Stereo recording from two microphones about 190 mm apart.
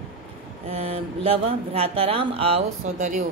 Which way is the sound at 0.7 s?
30° right (ahead or behind).